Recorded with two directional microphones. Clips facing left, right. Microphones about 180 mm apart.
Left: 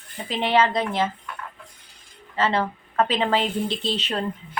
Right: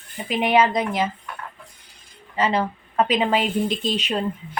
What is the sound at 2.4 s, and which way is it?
Speech, 15° right (ahead or behind).